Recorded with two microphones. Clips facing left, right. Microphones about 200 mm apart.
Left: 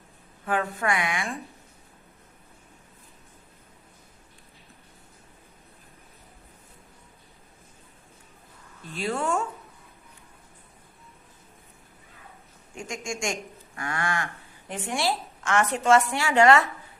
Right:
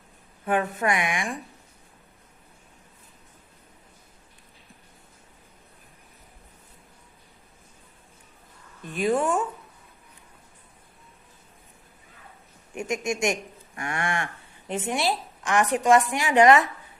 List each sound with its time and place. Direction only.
0.4 s speech: 20° right (ahead or behind)
8.9 s a woman's voice: 20° right (ahead or behind)
12.7 s a woman's voice: 20° right (ahead or behind)